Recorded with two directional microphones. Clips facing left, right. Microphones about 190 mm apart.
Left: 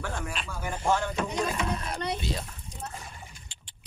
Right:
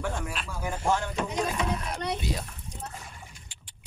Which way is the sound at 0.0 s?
5° right (ahead or behind).